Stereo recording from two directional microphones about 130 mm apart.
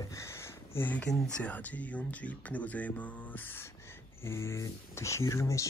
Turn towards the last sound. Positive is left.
turn(degrees=25)  # may be behind; listen again after turning